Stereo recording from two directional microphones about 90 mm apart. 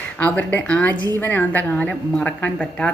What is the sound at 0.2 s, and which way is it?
A woman's voice, 20° left (ahead or behind).